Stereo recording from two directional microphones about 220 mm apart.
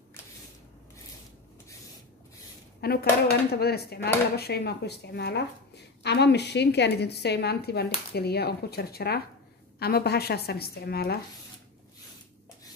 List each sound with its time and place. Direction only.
2.8 s a woman's voice: 45° left (ahead or behind)